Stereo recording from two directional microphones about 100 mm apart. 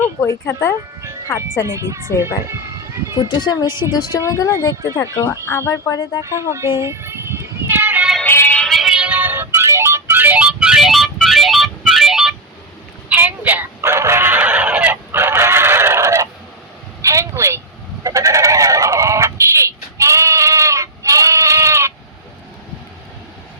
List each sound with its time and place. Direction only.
0.2 s speech: 25° left (ahead or behind)
1.6 s speech: 30° right (ahead or behind)
2.5 s a sound: 30° right (ahead or behind)
3.2 s speech: 45° left (ahead or behind)
3.7 s a woman's voice: 25° right (ahead or behind)
4.3 s speech: 35° left (ahead or behind)
6.2 s children playing: 30° right (ahead or behind)
8.2 s music: 20° left (ahead or behind)
8.5 s music: 5° left (ahead or behind)
13.1 s music: 15° right (ahead or behind)
17.0 s a sound: 30° right (ahead or behind)
18.0 s sheep: 35° right (ahead or behind)